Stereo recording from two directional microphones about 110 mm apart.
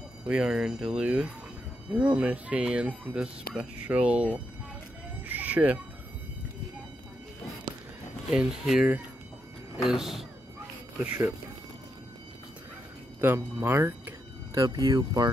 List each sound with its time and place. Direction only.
0.3 s speech: 5° right (ahead or behind)
5.3 s fowl: 15° right (ahead or behind)
8.3 s speech: 5° right (ahead or behind)
11.0 s speech: 15° right (ahead or behind)
13.2 s speech: 20° right (ahead or behind)
14.5 s speech: 35° right (ahead or behind)